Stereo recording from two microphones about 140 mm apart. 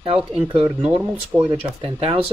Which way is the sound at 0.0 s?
40° right (ahead or behind).